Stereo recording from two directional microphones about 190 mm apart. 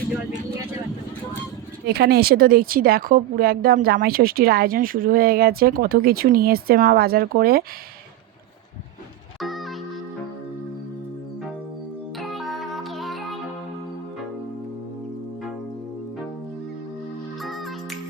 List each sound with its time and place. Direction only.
1.9 s speech: 55° right (ahead or behind)
9.4 s music: centre (ahead or behind)
12.1 s music: centre (ahead or behind)
17.4 s music: centre (ahead or behind)